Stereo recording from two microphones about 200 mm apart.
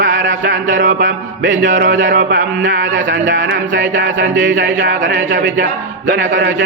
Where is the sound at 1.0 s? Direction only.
40° right (ahead or behind).